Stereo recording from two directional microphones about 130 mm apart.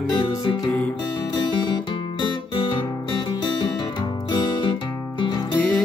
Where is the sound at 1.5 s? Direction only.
35° left (ahead or behind).